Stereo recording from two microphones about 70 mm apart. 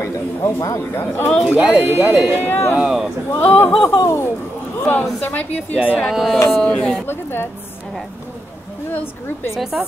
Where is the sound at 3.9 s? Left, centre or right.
Left.